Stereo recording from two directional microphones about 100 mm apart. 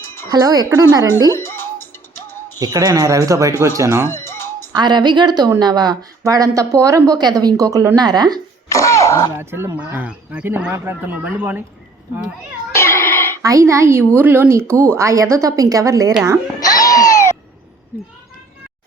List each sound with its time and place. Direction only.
0.3 s speech: 40° right (ahead or behind)
1.4 s speech: 25° left (ahead or behind)
2.6 s speech: 40° right (ahead or behind)
4.1 s music: 25° left (ahead or behind)
4.7 s a woman's voice: 45° right (ahead or behind)
8.7 s throat clearing: 30° left (ahead or behind)
9.3 s speech: 25° right (ahead or behind)
12.7 s cat: 25° left (ahead or behind)
13.4 s speech: 35° right (ahead or behind)
16.6 s cat: 35° left (ahead or behind)